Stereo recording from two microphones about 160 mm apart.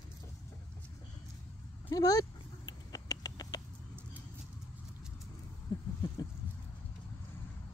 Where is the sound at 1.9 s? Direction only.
25° left (ahead or behind).